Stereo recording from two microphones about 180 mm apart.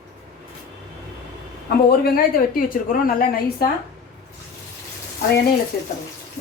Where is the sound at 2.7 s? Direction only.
50° left (ahead or behind).